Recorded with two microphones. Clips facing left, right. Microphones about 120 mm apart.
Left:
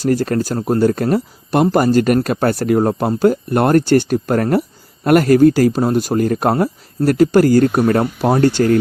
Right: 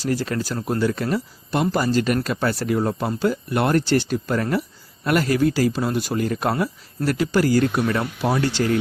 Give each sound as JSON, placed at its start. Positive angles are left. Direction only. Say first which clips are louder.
{"t": 0.0, "sound": "speech", "louder": "left 7 dB", "side_deg": 50}